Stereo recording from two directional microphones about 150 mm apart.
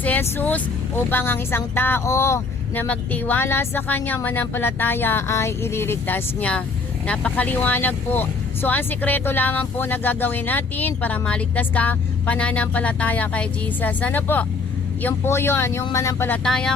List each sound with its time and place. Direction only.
0.0 s speech: 10° left (ahead or behind)
16.4 s speech: 5° left (ahead or behind)